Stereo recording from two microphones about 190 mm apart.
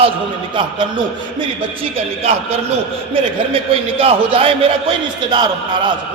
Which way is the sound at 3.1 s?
30° right (ahead or behind).